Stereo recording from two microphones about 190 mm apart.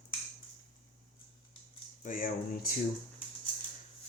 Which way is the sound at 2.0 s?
45° left (ahead or behind).